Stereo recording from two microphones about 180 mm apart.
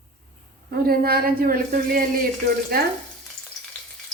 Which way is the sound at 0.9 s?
55° right (ahead or behind).